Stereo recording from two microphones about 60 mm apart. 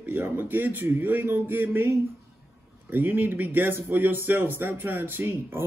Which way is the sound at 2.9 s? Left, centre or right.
Right.